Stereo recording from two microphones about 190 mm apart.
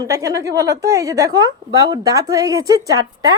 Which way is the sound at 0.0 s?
15° right (ahead or behind).